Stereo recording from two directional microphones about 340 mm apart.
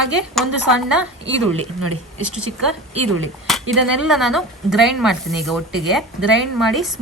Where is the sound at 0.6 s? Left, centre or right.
Right.